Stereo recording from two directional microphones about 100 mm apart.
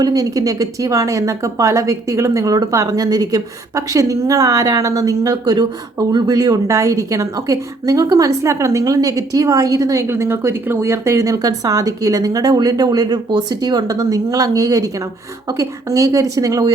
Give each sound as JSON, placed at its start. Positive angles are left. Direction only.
{"t": 0.0, "sound": "a woman's voice", "side_deg": -40}